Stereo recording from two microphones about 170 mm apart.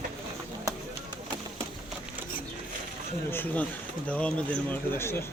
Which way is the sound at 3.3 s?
10° left (ahead or behind).